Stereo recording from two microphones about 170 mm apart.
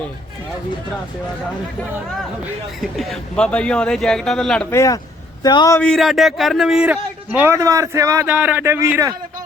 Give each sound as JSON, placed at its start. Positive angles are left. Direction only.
{"t": 2.8, "sound": "a man's voice", "side_deg": 0}
{"t": 4.7, "sound": "a man's voice", "side_deg": 20}
{"t": 5.8, "sound": "a man's voice", "side_deg": 0}